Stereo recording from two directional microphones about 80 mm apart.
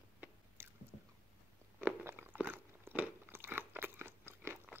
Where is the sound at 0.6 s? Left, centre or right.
Right.